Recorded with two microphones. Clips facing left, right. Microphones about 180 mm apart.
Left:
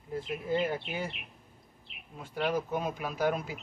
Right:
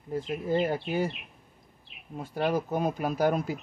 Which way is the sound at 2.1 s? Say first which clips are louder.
Right 3 dB; 40° right (ahead or behind).